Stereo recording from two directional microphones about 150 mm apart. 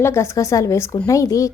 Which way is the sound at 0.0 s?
20° left (ahead or behind).